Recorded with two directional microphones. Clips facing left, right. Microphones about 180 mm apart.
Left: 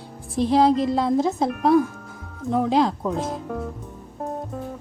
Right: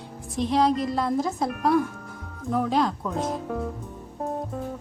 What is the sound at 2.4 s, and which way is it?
Speech, 25° left (ahead or behind).